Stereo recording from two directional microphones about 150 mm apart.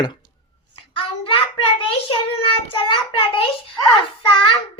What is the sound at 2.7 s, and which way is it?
Child singing, 35° left (ahead or behind).